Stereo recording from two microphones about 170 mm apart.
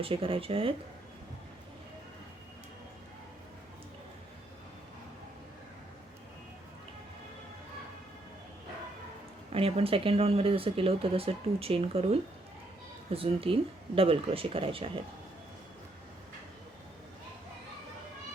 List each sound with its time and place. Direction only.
0.0 s speech: 30° right (ahead or behind)
9.5 s speech: 35° right (ahead or behind)